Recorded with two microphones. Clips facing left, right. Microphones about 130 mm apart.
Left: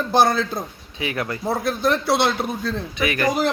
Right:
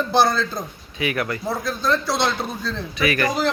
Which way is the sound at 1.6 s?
65° left (ahead or behind).